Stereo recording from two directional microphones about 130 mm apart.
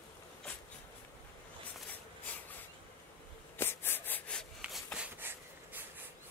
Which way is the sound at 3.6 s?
20° left (ahead or behind).